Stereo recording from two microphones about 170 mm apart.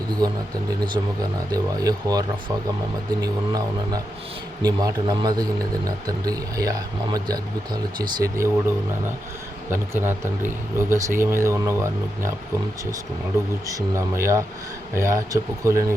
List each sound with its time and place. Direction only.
1.0 s speech: 20° right (ahead or behind)
13.7 s speech: 15° right (ahead or behind)